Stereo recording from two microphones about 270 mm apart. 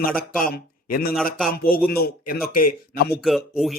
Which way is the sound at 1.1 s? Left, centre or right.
Centre.